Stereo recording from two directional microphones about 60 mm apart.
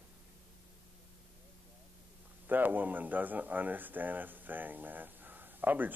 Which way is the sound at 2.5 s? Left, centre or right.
Right.